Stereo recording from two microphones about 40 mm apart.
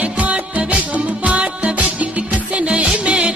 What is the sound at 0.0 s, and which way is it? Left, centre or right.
Music, right.